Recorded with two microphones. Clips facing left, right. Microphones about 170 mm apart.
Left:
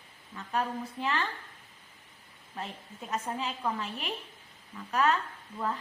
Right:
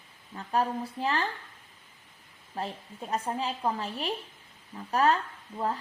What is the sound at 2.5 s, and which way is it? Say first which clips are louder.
A woman's voice: right 5 dB; 35° right (ahead or behind).